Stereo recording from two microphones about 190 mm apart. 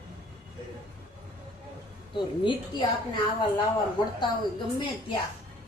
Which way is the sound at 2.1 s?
25° left (ahead or behind).